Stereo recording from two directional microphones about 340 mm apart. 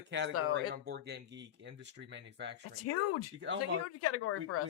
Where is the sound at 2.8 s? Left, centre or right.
Left.